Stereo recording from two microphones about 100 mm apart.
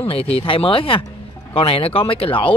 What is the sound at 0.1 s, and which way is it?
A man's voice, 75° left (ahead or behind).